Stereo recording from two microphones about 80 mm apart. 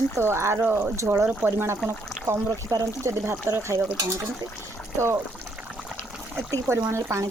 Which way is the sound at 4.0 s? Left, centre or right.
Right.